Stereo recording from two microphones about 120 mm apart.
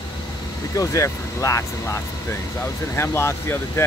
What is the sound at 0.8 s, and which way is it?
Speech, 25° left (ahead or behind).